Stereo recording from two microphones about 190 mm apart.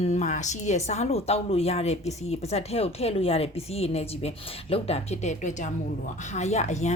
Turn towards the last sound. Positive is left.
turn(degrees=35)  # may be behind; listen again after turning